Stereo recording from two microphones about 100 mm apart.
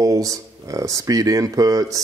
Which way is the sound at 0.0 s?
35° right (ahead or behind).